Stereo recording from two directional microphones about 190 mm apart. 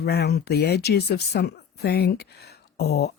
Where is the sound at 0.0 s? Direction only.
60° left (ahead or behind).